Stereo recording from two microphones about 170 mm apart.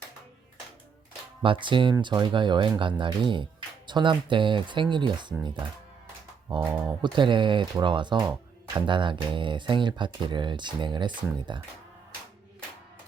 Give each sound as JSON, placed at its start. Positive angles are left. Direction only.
{"t": 1.4, "sound": "speech", "side_deg": -30}